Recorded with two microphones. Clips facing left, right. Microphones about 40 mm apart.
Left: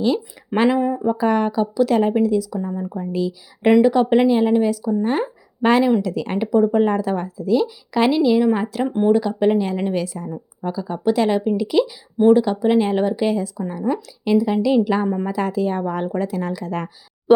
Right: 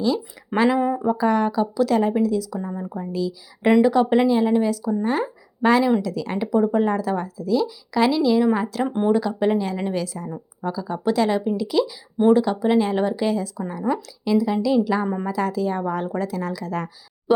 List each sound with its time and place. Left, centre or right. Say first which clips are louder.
0.0 s a woman's voice: left 2 dB; left
0.8 s speech: left 1 dB; centre
1.1 s a woman's voice: left 1 dB; left
2.6 s speech: left 3 dB; centre
3.1 s a woman's voice: left 2 dB; left
3.7 s a woman's voice: left 2 dB; centre; by 6.5 s left
6.5 s a woman's voice: left 3 dB; centre
8.2 s a woman's voice: left 2 dB; centre